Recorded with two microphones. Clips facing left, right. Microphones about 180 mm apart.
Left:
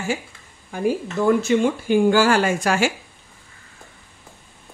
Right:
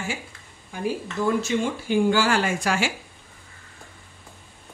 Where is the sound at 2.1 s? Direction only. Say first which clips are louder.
Left 5 dB; 45° left (ahead or behind).